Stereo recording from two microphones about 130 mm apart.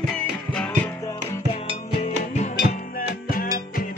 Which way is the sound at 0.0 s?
5° left (ahead or behind).